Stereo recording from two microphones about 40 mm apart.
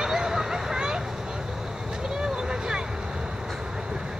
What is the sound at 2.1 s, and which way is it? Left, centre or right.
Vehicle, centre.